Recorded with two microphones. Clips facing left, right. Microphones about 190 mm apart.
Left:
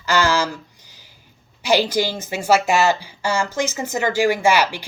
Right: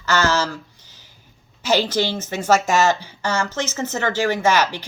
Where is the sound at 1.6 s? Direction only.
10° left (ahead or behind).